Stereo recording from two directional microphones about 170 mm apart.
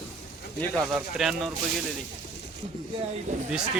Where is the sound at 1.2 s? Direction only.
Centre (ahead or behind).